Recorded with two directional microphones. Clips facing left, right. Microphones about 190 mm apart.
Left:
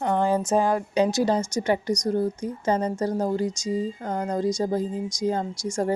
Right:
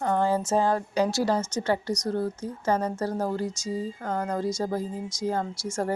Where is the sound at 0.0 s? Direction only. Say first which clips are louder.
Left 2 dB; 15° left (ahead or behind).